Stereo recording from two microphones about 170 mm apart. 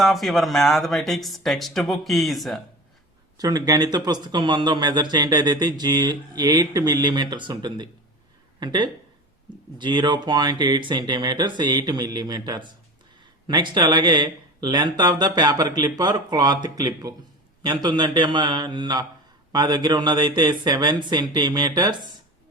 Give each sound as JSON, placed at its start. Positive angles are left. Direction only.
{"t": 0.0, "sound": "speech", "side_deg": 0}
{"t": 3.3, "sound": "speech", "side_deg": -20}